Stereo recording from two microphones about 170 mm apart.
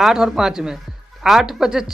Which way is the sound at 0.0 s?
5° right (ahead or behind).